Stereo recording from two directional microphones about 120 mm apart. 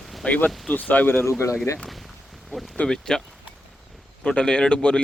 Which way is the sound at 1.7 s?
5° left (ahead or behind).